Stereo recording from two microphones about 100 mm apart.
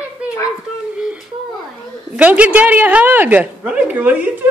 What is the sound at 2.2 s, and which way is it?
A woman's voice, 15° right (ahead or behind).